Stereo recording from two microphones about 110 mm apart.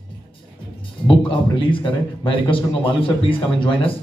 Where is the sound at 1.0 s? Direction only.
50° left (ahead or behind).